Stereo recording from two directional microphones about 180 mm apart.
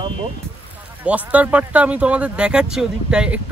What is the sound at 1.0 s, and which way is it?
Speech, 5° right (ahead or behind).